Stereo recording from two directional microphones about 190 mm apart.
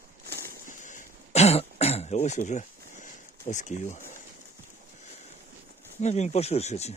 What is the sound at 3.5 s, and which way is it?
Speech, 40° left (ahead or behind).